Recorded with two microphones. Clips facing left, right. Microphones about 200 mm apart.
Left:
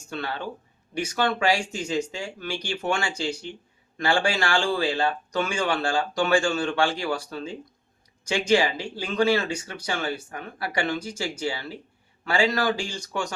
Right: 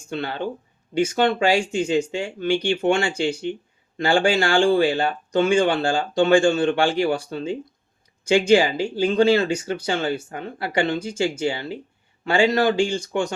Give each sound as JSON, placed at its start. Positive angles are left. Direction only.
{"t": 0.1, "sound": "speech", "side_deg": -25}